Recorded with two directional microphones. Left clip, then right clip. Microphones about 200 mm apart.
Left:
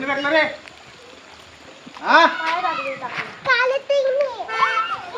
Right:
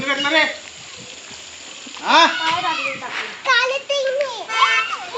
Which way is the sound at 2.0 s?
10° right (ahead or behind).